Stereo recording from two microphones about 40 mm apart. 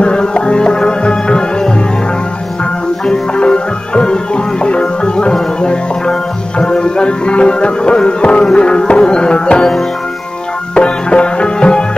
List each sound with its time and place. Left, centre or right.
0.0 s music: left
3.1 s music: left
10.7 s music: left